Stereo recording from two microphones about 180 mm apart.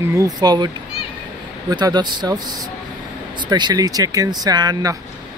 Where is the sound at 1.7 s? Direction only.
25° right (ahead or behind).